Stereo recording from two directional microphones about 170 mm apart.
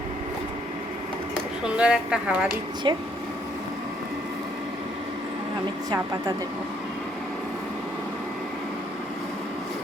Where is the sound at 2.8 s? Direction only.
30° right (ahead or behind).